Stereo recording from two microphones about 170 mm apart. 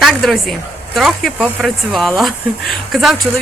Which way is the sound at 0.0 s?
Centre (ahead or behind).